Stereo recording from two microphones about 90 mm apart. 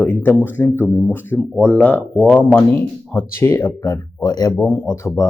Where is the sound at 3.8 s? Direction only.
45° left (ahead or behind).